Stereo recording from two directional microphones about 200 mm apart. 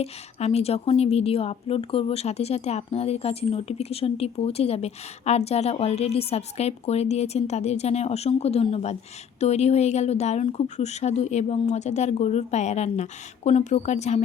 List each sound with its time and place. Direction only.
0.0 s a woman's voice: 30° left (ahead or behind)